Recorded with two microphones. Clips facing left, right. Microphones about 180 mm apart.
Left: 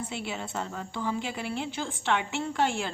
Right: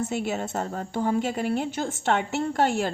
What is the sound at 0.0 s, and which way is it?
A woman's voice, 45° right (ahead or behind).